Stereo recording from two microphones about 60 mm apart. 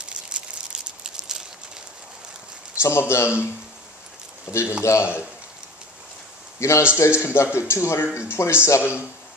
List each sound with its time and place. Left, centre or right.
0.0 s a sound: centre
2.8 s speech: left
4.5 s speech: left
6.6 s speech: left
7.4 s a man's voice: centre
7.7 s speech: left